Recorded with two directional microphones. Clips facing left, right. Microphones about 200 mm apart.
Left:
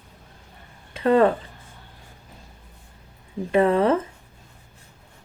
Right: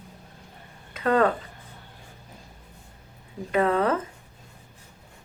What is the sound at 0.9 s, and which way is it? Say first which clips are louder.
Speech: left 4 dB; 30° left (ahead or behind).